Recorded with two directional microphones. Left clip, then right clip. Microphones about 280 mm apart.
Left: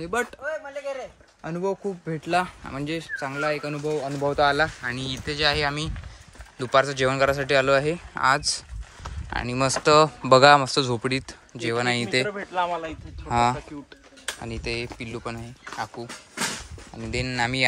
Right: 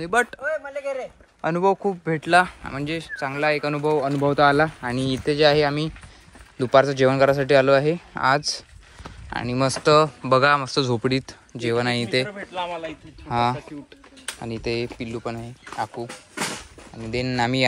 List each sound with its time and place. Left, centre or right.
0.0 s speech: centre
0.5 s a sound: right
1.4 s speech: centre
4.3 s speech: right
4.8 s speech: centre
9.0 s a sound: centre
9.8 s speech: centre
12.3 s speech: left
13.3 s speech: centre